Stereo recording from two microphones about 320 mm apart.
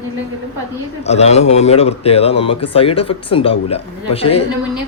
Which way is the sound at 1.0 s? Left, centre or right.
Centre.